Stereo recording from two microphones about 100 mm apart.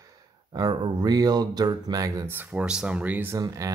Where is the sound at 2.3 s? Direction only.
15° right (ahead or behind).